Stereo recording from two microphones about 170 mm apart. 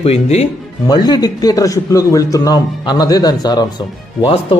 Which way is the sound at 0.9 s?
25° left (ahead or behind).